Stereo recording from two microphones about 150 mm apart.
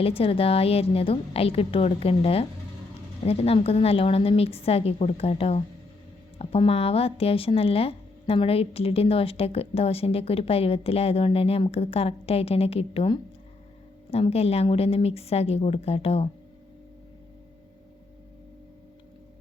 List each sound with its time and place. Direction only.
0.0 s a woman's voice: 40° left (ahead or behind)